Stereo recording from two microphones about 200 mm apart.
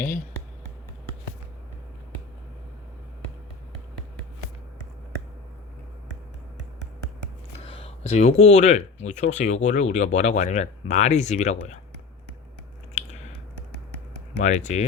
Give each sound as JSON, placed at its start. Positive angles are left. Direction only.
{"t": 7.6, "sound": "speech", "side_deg": 30}
{"t": 12.9, "sound": "chewing", "side_deg": 35}
{"t": 14.4, "sound": "speech", "side_deg": 35}